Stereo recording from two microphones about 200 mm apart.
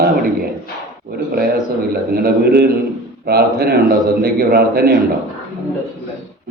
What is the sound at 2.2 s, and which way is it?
Speech, 50° right (ahead or behind).